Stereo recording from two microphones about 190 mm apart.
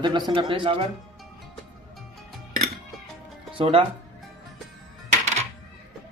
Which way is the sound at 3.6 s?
30° right (ahead or behind).